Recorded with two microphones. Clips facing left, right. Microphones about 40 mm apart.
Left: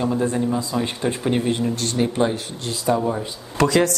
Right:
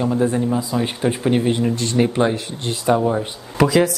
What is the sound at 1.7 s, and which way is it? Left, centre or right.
Speech, right.